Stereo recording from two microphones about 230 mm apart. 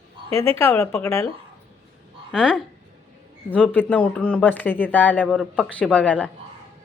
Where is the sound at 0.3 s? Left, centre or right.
Right.